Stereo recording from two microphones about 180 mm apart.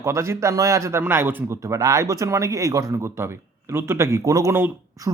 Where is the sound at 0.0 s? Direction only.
15° right (ahead or behind).